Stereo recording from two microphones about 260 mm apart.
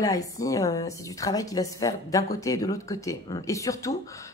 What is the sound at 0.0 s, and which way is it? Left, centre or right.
A woman's voice, centre.